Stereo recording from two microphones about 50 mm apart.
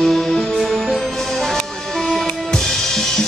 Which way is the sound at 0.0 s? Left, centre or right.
Centre.